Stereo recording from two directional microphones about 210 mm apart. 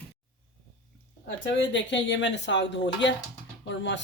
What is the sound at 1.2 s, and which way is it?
Speech, 60° left (ahead or behind).